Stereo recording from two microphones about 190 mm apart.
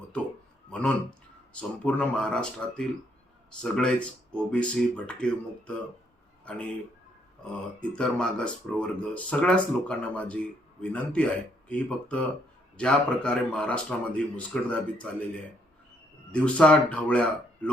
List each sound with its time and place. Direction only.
0.7 s speech: 5° left (ahead or behind)
7.4 s speech: 5° left (ahead or behind)
16.3 s speech: 5° left (ahead or behind)